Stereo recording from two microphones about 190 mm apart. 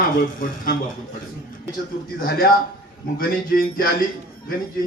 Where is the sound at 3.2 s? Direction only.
50° left (ahead or behind).